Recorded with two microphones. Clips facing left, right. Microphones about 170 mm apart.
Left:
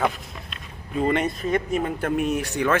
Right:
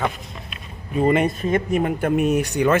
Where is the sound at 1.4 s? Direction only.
50° right (ahead or behind).